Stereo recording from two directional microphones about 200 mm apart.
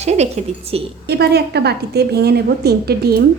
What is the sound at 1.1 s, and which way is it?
A woman's voice, 55° right (ahead or behind).